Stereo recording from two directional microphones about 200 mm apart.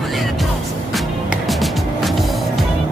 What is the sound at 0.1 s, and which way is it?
Music, centre (ahead or behind).